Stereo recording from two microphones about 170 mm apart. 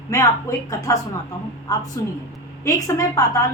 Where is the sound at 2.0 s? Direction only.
15° left (ahead or behind).